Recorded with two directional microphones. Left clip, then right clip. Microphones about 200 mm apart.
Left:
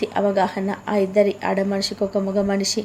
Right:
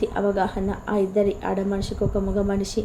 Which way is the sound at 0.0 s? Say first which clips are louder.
Left 3 dB; 20° left (ahead or behind).